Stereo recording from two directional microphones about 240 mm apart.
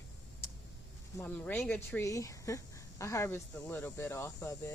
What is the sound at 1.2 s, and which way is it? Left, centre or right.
Speech, centre.